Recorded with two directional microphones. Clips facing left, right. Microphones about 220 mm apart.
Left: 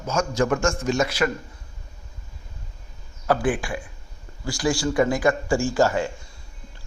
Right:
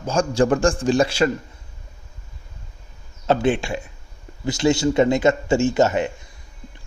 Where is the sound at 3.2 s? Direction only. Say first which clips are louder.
Right 3 dB; 25° right (ahead or behind).